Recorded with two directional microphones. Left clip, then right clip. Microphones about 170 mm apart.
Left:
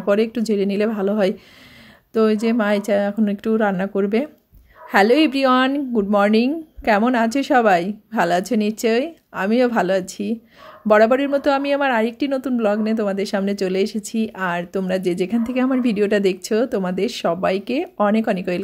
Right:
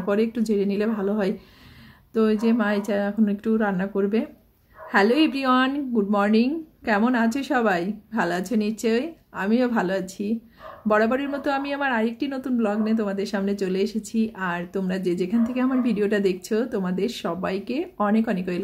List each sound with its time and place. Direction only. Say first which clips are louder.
0.0 s a woman's voice: left 5 dB; 45° left (ahead or behind)